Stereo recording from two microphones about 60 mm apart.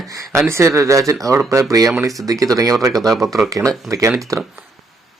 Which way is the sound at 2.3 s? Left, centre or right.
Right.